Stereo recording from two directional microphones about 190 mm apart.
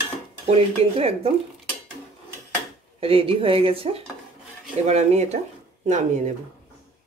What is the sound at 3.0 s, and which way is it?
A woman's voice, 30° right (ahead or behind).